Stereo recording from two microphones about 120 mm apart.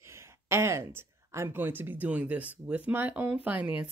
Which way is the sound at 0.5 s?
25° right (ahead or behind).